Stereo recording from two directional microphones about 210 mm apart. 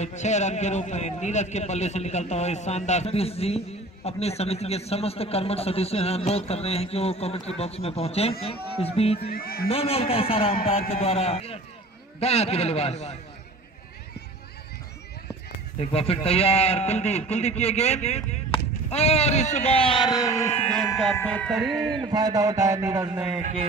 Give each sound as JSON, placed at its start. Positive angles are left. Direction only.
{"t": 0.0, "sound": "a man's voice", "side_deg": 35}
{"t": 9.3, "sound": "speech", "side_deg": 45}
{"t": 9.7, "sound": "a man's voice", "side_deg": 30}
{"t": 15.8, "sound": "a man's voice", "side_deg": 30}
{"t": 22.0, "sound": "a man's voice", "side_deg": -20}